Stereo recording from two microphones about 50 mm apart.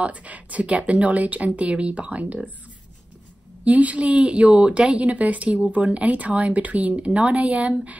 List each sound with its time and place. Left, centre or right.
0.0 s speech: right
3.6 s speech: right